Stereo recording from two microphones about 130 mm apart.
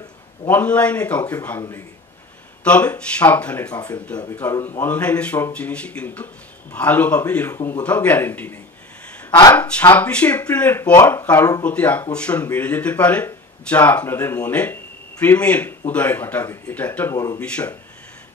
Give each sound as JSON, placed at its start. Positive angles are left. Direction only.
{"t": 0.5, "sound": "speech", "side_deg": 10}
{"t": 2.6, "sound": "speech", "side_deg": 10}
{"t": 4.3, "sound": "speech", "side_deg": 20}
{"t": 9.6, "sound": "speech", "side_deg": 10}
{"t": 17.1, "sound": "speech", "side_deg": 25}
{"t": 17.4, "sound": "speech", "side_deg": 10}